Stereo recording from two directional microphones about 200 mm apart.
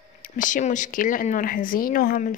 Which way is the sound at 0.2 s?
40° left (ahead or behind).